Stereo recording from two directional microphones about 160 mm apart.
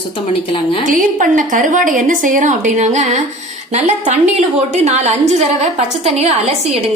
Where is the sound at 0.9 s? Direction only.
55° right (ahead or behind).